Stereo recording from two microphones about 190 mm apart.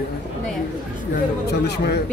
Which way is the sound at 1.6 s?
60° left (ahead or behind).